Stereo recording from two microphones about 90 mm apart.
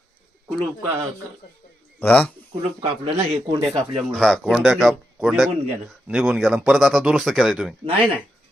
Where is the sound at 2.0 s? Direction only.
20° left (ahead or behind).